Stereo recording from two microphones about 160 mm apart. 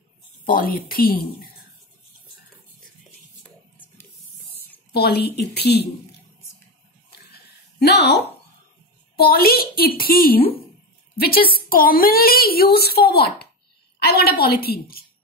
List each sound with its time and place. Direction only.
0.5 s a woman's voice: 65° left (ahead or behind)
4.9 s a woman's voice: 85° left
7.8 s a woman's voice: 90° left
9.1 s a woman's voice: 70° left (ahead or behind)